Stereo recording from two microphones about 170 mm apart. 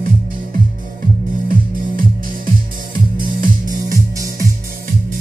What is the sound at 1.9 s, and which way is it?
Music, 55° right (ahead or behind).